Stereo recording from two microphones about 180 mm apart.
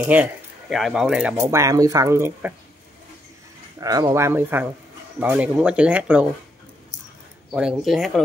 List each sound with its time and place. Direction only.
0.0 s speech: 5° right (ahead or behind)
1.3 s speech: 15° right (ahead or behind)
3.8 s speech: 20° right (ahead or behind)
7.5 s speech: 5° right (ahead or behind)